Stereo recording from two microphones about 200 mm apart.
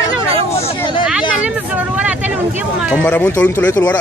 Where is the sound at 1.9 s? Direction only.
5° right (ahead or behind).